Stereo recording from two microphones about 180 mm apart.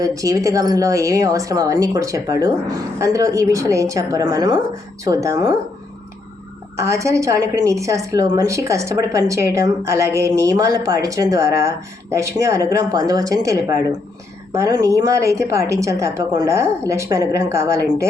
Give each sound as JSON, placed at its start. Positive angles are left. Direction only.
{"t": 0.0, "sound": "a woman's voice", "side_deg": -20}
{"t": 6.7, "sound": "a woman's voice", "side_deg": -15}